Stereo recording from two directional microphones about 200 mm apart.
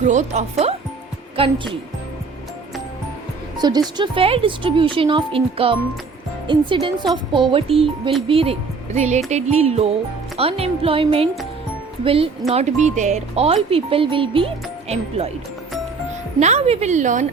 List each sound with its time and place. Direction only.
0.0 s speech: 35° right (ahead or behind)
3.6 s speech: 20° right (ahead or behind)
16.4 s speech: 35° right (ahead or behind)